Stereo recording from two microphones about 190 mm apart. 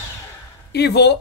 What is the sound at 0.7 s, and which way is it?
Speech, 60° left (ahead or behind).